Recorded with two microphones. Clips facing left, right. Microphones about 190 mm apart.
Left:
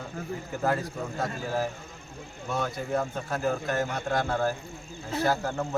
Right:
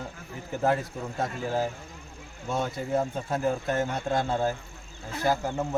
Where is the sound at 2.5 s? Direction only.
25° right (ahead or behind).